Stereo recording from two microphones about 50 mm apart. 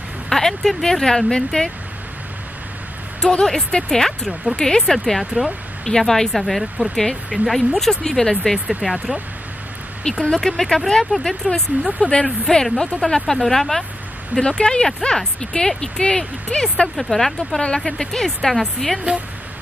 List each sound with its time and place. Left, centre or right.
0.3 s speech: centre
3.2 s speech: centre
8.6 s speech: centre
10.0 s speech: centre
14.4 s speech: centre